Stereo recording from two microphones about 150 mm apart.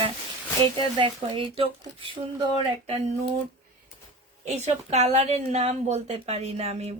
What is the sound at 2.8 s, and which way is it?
Speech, 45° right (ahead or behind).